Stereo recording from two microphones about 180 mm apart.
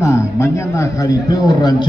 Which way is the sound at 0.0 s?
15° left (ahead or behind).